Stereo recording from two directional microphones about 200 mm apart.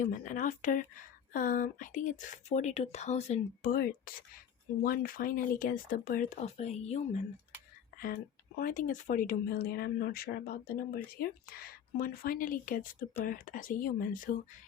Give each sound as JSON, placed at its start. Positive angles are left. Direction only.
{"t": 0.0, "sound": "speech", "side_deg": 40}
{"t": 7.9, "sound": "speech", "side_deg": 45}